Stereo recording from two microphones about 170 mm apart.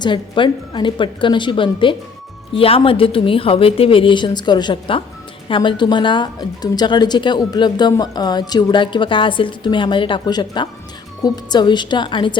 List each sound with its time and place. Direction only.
0.0 s a woman's voice: 30° left (ahead or behind)